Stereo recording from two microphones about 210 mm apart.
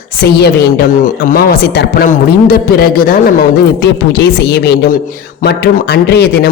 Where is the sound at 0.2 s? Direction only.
50° left (ahead or behind).